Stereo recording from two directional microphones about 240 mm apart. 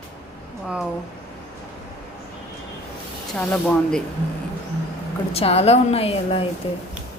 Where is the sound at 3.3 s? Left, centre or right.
Centre.